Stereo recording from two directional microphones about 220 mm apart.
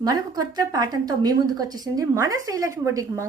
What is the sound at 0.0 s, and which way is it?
A woman's voice, 15° right (ahead or behind).